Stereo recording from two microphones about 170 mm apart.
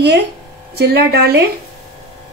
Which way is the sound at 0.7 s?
70° right (ahead or behind).